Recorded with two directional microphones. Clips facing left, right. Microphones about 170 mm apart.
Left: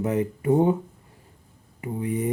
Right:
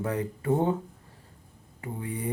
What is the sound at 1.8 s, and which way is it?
Speech, 20° left (ahead or behind).